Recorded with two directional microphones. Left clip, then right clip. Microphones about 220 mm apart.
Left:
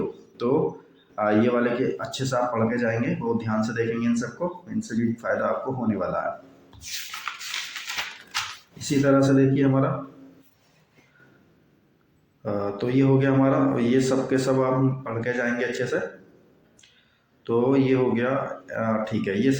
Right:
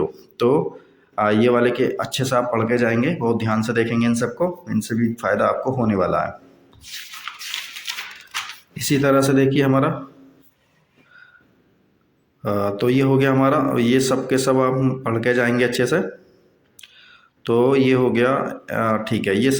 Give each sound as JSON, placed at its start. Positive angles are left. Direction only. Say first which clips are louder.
{"t": 0.4, "sound": "speech", "louder": "right 5 dB", "side_deg": -45}
{"t": 8.8, "sound": "speech", "louder": "right 3 dB", "side_deg": -45}
{"t": 12.4, "sound": "speech", "louder": "right 6 dB", "side_deg": -45}
{"t": 17.4, "sound": "speech", "louder": "right 5 dB", "side_deg": -45}